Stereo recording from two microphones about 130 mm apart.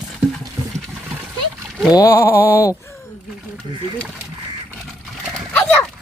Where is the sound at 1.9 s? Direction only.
25° left (ahead or behind).